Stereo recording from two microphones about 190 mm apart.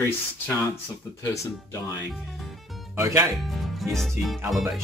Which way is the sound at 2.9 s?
15° right (ahead or behind).